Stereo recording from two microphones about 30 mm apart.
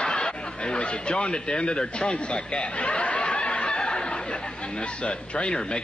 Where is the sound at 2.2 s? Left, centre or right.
Left.